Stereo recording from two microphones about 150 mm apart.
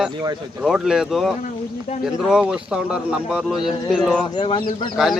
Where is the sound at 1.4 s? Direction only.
50° left (ahead or behind).